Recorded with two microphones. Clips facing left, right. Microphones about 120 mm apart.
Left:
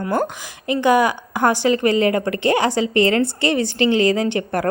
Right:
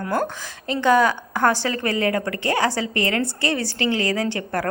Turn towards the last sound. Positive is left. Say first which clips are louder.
# left 4 dB
turn(degrees=20)  # may be behind; listen again after turning